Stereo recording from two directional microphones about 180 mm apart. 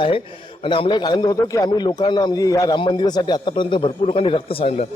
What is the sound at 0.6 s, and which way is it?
A man's voice, 25° left (ahead or behind).